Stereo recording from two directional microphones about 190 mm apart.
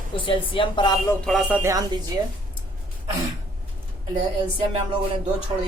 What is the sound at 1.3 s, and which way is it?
Speech, 5° right (ahead or behind).